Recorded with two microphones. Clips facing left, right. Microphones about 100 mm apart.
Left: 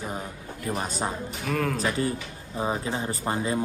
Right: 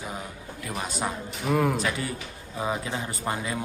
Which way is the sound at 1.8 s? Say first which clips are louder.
Left 3 dB; 35° left (ahead or behind).